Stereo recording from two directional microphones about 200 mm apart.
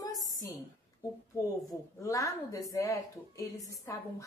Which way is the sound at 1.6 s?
15° left (ahead or behind).